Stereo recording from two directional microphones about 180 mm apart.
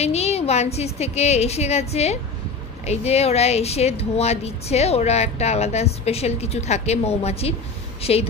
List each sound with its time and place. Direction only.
0.0 s speech: 35° left (ahead or behind)